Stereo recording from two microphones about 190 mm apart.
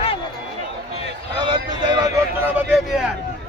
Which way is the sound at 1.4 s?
25° right (ahead or behind).